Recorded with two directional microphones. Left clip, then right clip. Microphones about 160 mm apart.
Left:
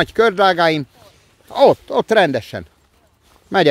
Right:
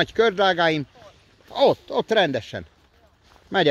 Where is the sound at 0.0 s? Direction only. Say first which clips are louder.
Left 5 dB; 40° left (ahead or behind).